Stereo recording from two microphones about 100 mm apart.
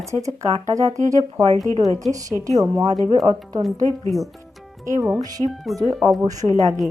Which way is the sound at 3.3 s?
90° right.